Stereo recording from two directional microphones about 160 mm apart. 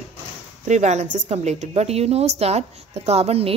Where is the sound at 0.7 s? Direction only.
45° right (ahead or behind).